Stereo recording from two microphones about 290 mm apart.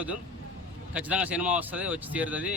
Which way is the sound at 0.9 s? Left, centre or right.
Centre.